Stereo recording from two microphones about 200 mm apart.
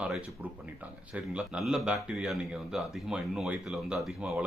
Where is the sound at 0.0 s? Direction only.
5° right (ahead or behind).